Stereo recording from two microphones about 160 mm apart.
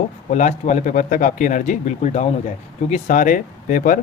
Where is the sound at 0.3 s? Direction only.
50° left (ahead or behind).